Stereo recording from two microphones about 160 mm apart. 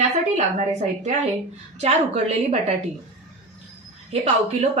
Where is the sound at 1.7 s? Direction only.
40° right (ahead or behind).